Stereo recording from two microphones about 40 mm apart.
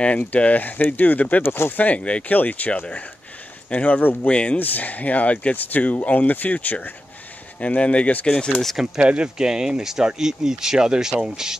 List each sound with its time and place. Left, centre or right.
0.3 s speech: left
1.4 s speech: left
1.8 s speech: left
3.7 s speech: left
4.0 s speech: left
4.3 s speech: left
4.6 s speech: left
7.6 s speech: left
8.3 s speech: left
8.9 s speech: right; by 11.5 s centre